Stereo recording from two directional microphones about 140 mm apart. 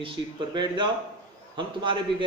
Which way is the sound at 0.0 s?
35° right (ahead or behind).